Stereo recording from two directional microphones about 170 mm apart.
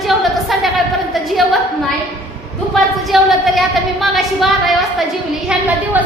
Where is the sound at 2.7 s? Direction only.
Centre (ahead or behind).